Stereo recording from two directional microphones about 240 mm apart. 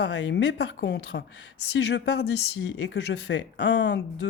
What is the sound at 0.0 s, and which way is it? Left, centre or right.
A woman's voice, left.